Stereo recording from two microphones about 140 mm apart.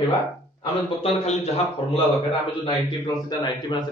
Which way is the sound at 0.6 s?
45° left (ahead or behind).